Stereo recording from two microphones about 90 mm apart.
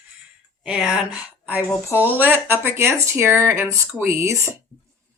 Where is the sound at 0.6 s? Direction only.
10° right (ahead or behind); by 4.5 s 35° right (ahead or behind).